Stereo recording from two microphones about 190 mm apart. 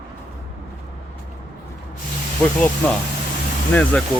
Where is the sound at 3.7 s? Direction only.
5° left (ahead or behind).